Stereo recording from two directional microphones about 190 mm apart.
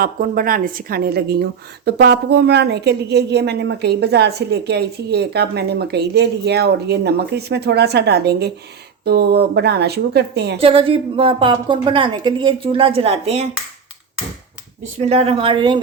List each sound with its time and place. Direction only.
0.0 s a woman's voice: 45° right (ahead or behind)
10.6 s a woman's voice: 30° right (ahead or behind)
14.9 s a woman's voice: 35° right (ahead or behind)